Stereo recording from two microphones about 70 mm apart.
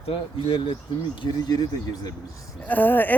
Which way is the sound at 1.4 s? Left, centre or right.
Left.